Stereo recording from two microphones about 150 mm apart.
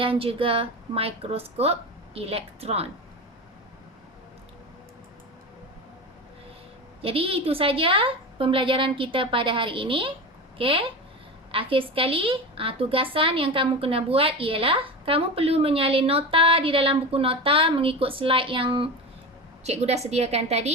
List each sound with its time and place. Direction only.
0.0 s a woman's voice: 35° right (ahead or behind)
7.0 s a woman's voice: 40° right (ahead or behind)
19.6 s a woman's voice: 45° right (ahead or behind)